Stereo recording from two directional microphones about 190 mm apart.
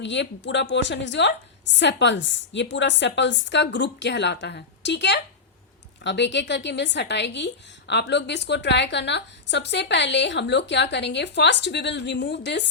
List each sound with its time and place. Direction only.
0.0 s a woman's voice: 70° left (ahead or behind)